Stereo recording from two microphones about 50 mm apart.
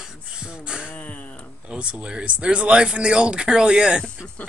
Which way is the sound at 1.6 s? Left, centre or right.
Right.